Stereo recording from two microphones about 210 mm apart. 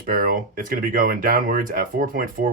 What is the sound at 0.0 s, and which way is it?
Speech, 45° right (ahead or behind).